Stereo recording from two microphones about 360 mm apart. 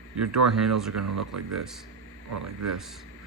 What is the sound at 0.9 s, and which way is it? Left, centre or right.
Speech, right.